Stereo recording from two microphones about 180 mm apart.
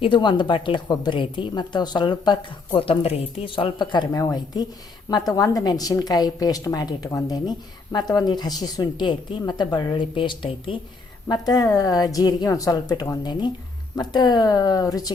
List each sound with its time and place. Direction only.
0.0 s a woman's voice: 25° left (ahead or behind)